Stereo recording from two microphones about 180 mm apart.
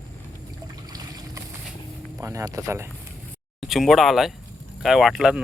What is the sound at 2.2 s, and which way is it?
Speech, 15° right (ahead or behind).